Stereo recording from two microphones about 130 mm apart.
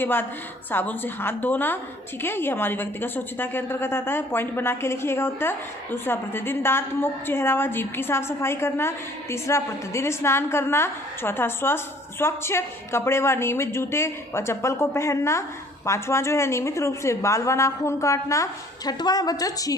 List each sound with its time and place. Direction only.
0.0 s a woman's voice: 15° left (ahead or behind)